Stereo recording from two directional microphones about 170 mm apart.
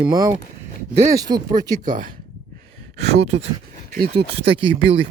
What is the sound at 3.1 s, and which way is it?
Speech, 40° right (ahead or behind).